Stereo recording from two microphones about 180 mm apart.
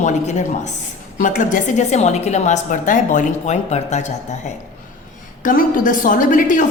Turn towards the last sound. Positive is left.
turn(degrees=45)  # may be behind; listen again after turning